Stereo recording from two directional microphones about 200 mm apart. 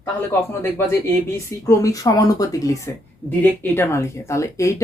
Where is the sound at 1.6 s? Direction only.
15° left (ahead or behind).